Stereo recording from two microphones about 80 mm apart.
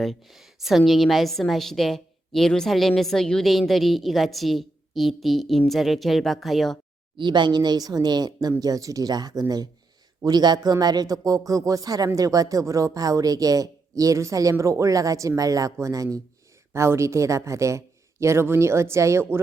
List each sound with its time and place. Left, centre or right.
0.0 s a woman's voice: centre
7.2 s speech: right
8.6 s a man's voice: right
16.7 s a man's voice: right